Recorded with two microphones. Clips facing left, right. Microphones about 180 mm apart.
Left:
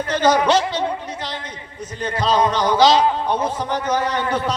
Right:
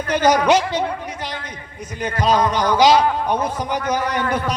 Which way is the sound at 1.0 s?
10° right (ahead or behind).